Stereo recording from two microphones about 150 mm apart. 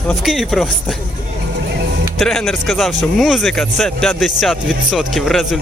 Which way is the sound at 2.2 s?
Centre (ahead or behind).